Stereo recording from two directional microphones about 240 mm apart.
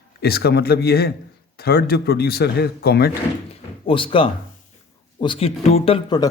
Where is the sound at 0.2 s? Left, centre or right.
Left.